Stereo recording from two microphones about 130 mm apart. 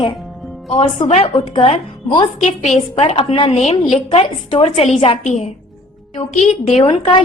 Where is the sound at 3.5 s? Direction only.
55° left (ahead or behind).